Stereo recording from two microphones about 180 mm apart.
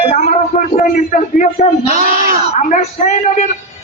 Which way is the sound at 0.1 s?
40° left (ahead or behind).